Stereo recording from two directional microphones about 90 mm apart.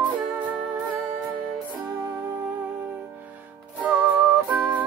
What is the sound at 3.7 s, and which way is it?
Music, 15° right (ahead or behind).